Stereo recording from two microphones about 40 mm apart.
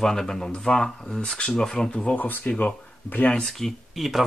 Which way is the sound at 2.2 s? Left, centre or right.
Left.